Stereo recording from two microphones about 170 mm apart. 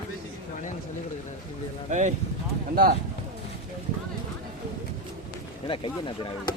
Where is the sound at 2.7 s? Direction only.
60° right (ahead or behind).